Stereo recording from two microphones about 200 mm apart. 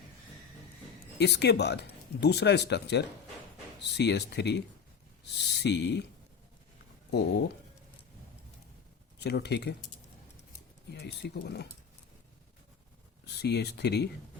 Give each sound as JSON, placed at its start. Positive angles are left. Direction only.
{"t": 1.2, "sound": "speech", "side_deg": 55}
{"t": 7.1, "sound": "speech", "side_deg": 55}
{"t": 9.1, "sound": "speech", "side_deg": 55}
{"t": 10.9, "sound": "speech", "side_deg": 55}
{"t": 13.2, "sound": "speech", "side_deg": 55}